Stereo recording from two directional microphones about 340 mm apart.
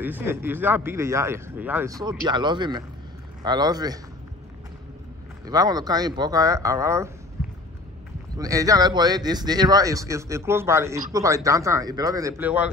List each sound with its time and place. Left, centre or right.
0.0 s speech: centre
5.4 s speech: centre
8.4 s speech: centre